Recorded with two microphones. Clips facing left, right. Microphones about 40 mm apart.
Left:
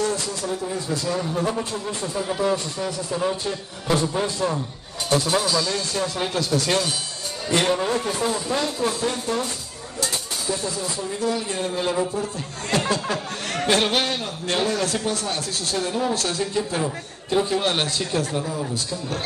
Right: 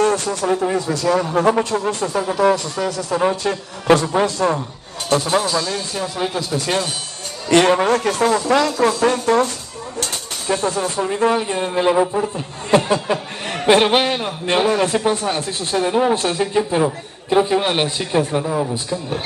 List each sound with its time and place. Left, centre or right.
0.0 s speech: right
2.3 s speech: right
5.4 s speech: right
5.9 s a man's voice: centre
7.4 s speech: right
9.9 s speech: right
12.7 s a man's voice: right